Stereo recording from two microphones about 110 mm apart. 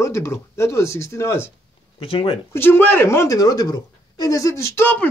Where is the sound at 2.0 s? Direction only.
55° left (ahead or behind).